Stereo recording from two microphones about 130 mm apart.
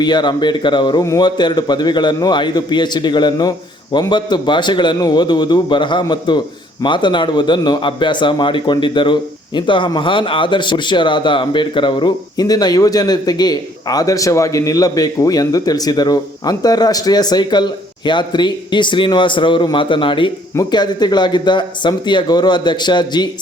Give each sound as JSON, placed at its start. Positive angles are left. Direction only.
{"t": 0.0, "sound": "speech", "side_deg": 35}